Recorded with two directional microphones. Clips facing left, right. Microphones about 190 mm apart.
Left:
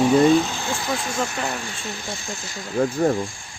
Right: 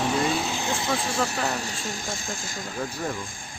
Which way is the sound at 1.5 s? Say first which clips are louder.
Even; 40° right (ahead or behind).